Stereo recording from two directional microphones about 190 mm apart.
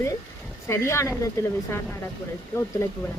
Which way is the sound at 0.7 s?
15° left (ahead or behind).